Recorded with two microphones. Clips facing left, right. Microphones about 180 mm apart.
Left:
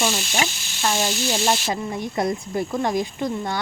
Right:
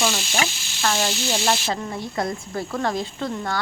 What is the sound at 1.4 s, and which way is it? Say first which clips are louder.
A woman's voice: left 1 dB; 20° left (ahead or behind).